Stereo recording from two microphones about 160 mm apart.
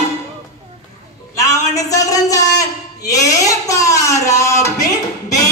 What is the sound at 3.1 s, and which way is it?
Music, 20° left (ahead or behind).